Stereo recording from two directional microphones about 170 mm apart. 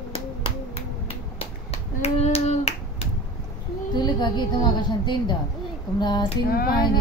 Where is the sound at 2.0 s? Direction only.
35° left (ahead or behind).